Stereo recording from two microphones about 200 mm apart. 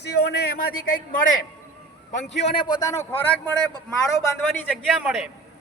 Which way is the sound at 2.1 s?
60° left (ahead or behind).